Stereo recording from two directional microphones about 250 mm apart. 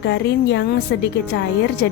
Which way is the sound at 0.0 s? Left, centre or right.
Left.